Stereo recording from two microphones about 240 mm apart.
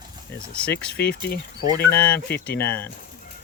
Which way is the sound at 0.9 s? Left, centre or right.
Left.